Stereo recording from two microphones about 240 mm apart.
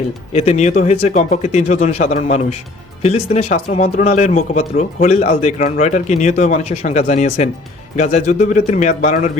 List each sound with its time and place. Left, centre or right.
0.3 s speech: left